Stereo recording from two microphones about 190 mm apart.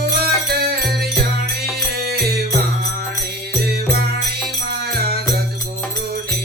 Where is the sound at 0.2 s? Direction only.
55° right (ahead or behind).